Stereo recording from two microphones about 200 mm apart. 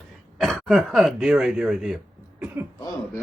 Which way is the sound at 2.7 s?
20° left (ahead or behind).